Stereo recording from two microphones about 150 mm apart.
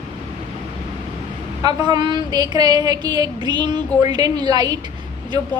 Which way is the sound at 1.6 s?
30° right (ahead or behind).